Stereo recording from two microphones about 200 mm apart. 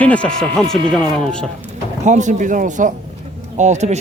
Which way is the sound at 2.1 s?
35° right (ahead or behind).